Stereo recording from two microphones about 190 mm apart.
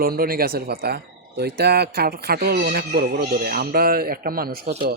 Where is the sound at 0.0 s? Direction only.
50° right (ahead or behind).